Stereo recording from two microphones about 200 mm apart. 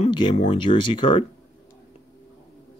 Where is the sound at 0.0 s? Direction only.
25° left (ahead or behind).